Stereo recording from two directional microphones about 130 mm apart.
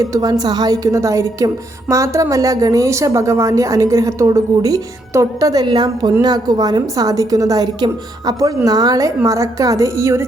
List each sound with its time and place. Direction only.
0.0 s a woman's voice: 25° right (ahead or behind)